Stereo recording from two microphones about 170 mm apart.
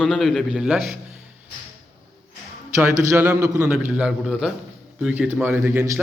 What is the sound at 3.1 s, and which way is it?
Speech, 15° right (ahead or behind).